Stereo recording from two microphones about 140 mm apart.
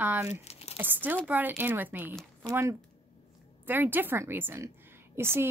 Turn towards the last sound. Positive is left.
turn(degrees=-15)  # may be behind; listen again after turning